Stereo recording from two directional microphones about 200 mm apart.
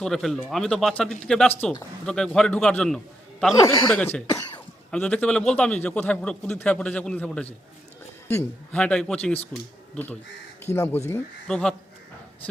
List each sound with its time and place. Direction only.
0.0 s a man's voice: centre (ahead or behind)
3.5 s a man's voice: 15° left (ahead or behind)
8.7 s a man's voice: 5° left (ahead or behind)